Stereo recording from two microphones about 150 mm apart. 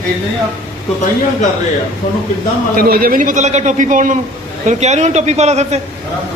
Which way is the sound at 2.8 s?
75° right (ahead or behind).